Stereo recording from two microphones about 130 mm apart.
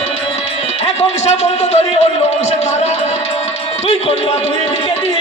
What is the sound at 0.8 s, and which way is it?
Speech, 55° left (ahead or behind).